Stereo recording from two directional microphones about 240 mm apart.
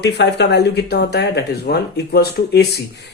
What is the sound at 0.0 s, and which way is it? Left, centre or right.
Speech, left.